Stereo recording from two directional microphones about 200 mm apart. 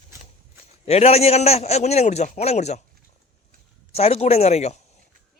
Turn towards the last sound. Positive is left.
turn(degrees=35)  # may be behind; listen again after turning